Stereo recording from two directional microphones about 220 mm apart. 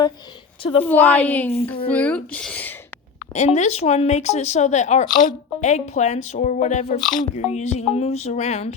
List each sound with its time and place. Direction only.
0.6 s speech: 25° left (ahead or behind)
0.9 s speech: 5° left (ahead or behind)
3.3 s speech: 30° left (ahead or behind)